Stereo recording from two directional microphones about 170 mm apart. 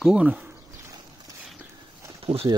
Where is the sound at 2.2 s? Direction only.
35° right (ahead or behind).